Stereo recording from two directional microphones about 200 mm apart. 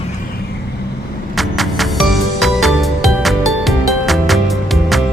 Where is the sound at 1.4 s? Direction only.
Centre (ahead or behind).